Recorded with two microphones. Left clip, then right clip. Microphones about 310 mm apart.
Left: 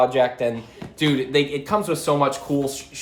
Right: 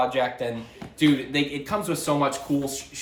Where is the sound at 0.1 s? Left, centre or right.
Left.